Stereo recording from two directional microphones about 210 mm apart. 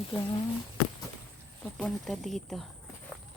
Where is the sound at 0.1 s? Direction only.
25° left (ahead or behind).